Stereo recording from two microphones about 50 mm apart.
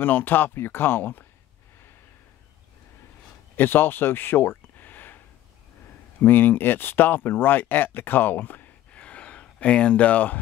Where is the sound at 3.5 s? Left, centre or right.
Left.